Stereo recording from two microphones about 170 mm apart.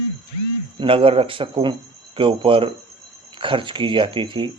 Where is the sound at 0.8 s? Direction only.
30° right (ahead or behind).